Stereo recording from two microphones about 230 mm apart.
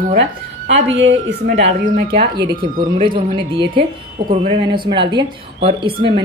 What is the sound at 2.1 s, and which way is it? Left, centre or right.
Speech, centre.